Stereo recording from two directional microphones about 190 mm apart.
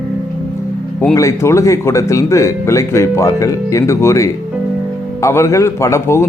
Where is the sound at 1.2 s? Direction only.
15° left (ahead or behind).